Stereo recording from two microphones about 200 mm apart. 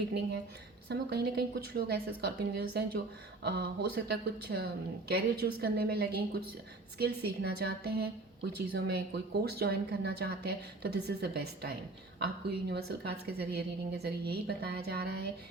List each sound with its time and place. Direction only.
0.9 s speech: 55° right (ahead or behind)